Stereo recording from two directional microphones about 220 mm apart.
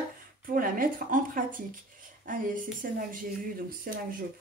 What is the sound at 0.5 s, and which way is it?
Speech, 40° right (ahead or behind).